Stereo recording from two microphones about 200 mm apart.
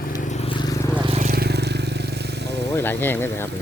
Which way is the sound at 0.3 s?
30° left (ahead or behind).